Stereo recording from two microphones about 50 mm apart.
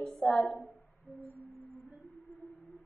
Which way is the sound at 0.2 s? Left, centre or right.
Centre.